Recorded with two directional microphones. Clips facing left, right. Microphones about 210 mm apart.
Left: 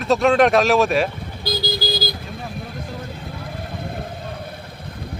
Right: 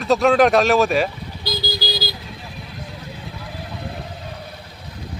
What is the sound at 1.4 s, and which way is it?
Vehicle, 55° left (ahead or behind).